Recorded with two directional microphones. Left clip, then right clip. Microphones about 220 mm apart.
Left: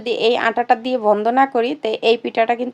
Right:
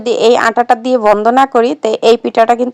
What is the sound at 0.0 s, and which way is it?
Speech, 30° right (ahead or behind).